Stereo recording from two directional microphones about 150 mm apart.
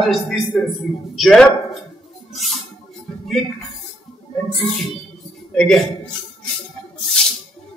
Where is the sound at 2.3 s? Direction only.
Centre (ahead or behind).